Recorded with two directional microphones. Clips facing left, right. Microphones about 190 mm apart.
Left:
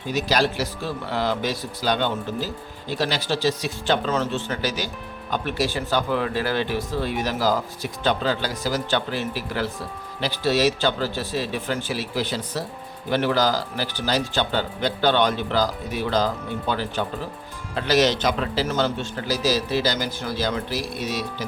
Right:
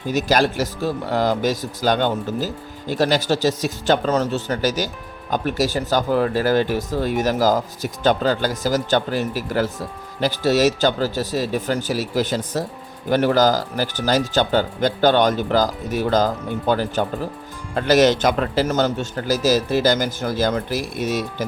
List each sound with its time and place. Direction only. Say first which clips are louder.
0.1 s speech: right 4 dB; 45° right (ahead or behind)